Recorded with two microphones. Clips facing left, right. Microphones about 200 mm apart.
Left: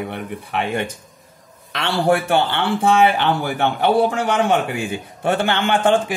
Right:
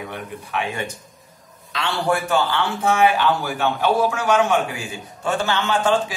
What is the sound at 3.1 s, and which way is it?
Speech, 60° left (ahead or behind).